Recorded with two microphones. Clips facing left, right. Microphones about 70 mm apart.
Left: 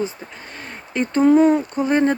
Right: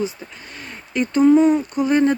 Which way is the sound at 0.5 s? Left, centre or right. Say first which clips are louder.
Right 1 dB; left.